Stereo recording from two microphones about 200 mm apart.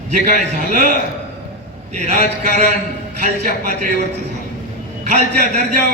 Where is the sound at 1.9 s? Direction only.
35° right (ahead or behind).